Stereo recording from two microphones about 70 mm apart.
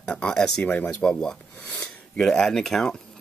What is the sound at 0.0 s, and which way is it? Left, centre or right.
Speech, centre.